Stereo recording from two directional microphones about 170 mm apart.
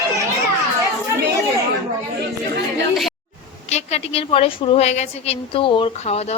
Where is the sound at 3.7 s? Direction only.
40° left (ahead or behind).